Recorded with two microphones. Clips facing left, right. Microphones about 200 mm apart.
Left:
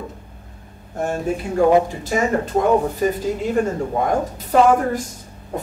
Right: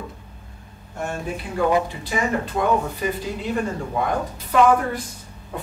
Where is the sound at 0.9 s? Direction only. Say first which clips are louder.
Left 6 dB; 35° left (ahead or behind).